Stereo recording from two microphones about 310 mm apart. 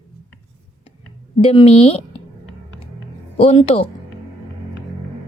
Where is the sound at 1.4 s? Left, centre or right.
Centre.